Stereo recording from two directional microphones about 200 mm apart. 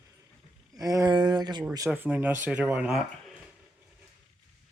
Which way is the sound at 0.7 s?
20° right (ahead or behind).